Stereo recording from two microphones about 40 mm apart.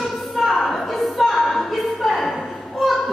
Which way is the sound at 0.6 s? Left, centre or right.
Centre.